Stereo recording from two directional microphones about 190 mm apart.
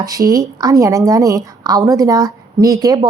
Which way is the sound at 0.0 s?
20° right (ahead or behind).